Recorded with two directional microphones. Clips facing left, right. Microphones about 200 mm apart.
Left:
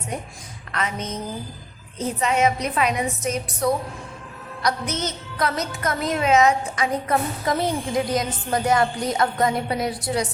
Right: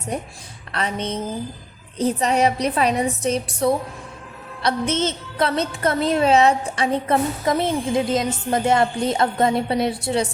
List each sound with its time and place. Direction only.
0.7 s a woman's voice: 30° right (ahead or behind)